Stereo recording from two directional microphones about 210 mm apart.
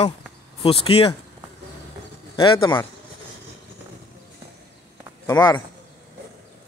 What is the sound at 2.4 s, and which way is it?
Speech, 25° left (ahead or behind).